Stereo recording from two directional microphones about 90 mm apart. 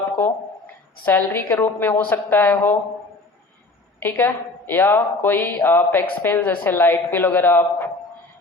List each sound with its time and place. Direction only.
1.0 s a woman's voice: 25° left (ahead or behind)
4.0 s a woman's voice: 20° left (ahead or behind)